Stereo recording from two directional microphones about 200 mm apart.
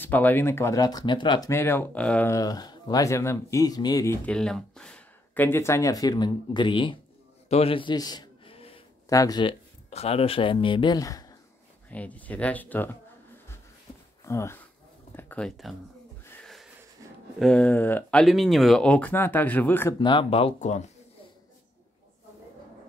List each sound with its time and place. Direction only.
0.0 s speech: 10° left (ahead or behind)
7.4 s a sound: 30° left (ahead or behind)
9.1 s speech: 20° left (ahead or behind)
11.9 s speech: 5° left (ahead or behind)
14.2 s speech: 15° left (ahead or behind)
17.4 s speech: 5° left (ahead or behind)
20.0 s speech: 25° left (ahead or behind)